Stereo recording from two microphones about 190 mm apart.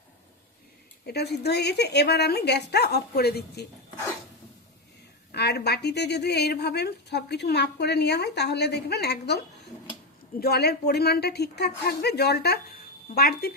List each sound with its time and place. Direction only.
1.0 s speech: 60° left (ahead or behind)
5.3 s speech: 60° left (ahead or behind)
10.4 s speech: 55° left (ahead or behind)